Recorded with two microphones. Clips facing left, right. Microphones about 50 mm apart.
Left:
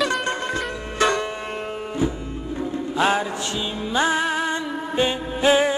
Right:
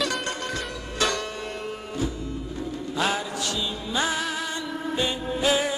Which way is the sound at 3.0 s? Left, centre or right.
Left.